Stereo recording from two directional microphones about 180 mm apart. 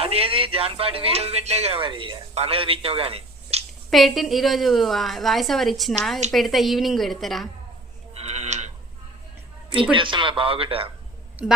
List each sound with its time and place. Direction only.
0.0 s speech: 35° right (ahead or behind)
3.8 s a woman's voice: centre (ahead or behind)
8.1 s a sound: 35° right (ahead or behind)
9.9 s speech: 30° right (ahead or behind)
11.4 s a woman's voice: 10° right (ahead or behind)